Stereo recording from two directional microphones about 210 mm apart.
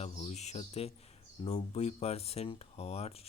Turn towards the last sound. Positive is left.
turn(degrees=30)  # may be behind; listen again after turning